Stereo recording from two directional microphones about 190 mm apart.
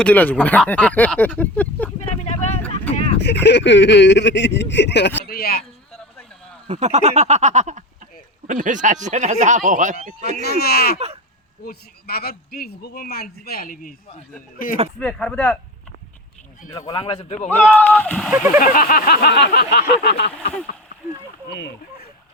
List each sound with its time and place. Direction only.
0.0 s speech: 10° left (ahead or behind)
2.0 s speech: 35° left (ahead or behind)
3.2 s speech: 65° left (ahead or behind)
5.3 s speech: 55° left (ahead or behind)
6.7 s speech: 35° right (ahead or behind)
10.6 s speech: 55° left (ahead or behind)
14.9 s speech: 5° left (ahead or behind)
16.7 s a man's voice: 20° left (ahead or behind)
17.6 s speech: 10° left (ahead or behind)
18.3 s speech: 10° right (ahead or behind)
18.6 s speech: 45° left (ahead or behind)
21.6 s speech: 65° left (ahead or behind)